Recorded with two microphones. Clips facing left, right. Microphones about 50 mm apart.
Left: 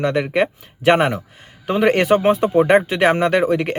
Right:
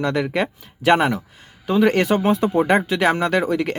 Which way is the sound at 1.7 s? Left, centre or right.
Left.